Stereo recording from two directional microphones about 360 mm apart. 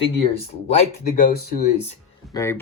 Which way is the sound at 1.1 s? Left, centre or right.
Left.